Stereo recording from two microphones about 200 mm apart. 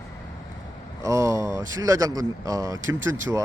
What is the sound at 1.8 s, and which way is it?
Speech, 15° right (ahead or behind).